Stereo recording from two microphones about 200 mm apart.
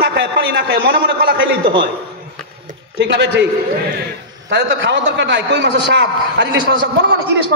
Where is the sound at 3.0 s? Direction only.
60° right (ahead or behind).